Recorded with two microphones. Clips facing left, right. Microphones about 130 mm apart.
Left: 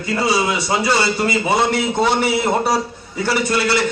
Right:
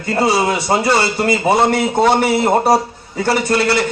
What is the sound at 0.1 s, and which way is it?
A man's voice, 50° right (ahead or behind).